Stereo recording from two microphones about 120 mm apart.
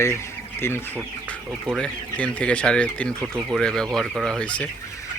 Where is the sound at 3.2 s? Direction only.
15° right (ahead or behind).